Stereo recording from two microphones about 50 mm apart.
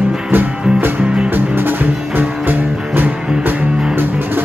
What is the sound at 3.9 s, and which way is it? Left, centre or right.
Music, right.